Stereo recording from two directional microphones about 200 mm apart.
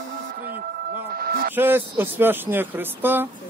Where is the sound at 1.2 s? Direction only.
50° right (ahead or behind).